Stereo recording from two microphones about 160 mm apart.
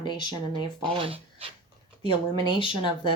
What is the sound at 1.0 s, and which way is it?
Speech, 35° right (ahead or behind).